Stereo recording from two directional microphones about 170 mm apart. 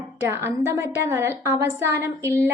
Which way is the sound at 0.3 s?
15° right (ahead or behind).